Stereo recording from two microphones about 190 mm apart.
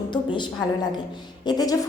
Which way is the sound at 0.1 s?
25° left (ahead or behind).